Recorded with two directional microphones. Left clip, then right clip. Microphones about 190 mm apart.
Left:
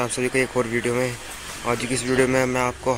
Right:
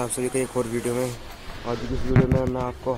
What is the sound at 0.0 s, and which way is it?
Speech, centre (ahead or behind).